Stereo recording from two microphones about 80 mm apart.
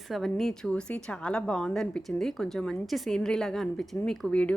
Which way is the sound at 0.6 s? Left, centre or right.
Centre.